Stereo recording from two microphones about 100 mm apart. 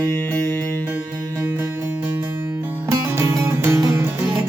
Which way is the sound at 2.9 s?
30° right (ahead or behind).